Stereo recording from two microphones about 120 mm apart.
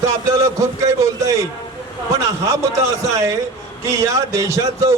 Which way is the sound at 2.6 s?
25° right (ahead or behind).